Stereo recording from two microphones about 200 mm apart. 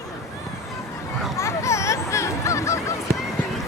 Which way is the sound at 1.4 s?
15° left (ahead or behind).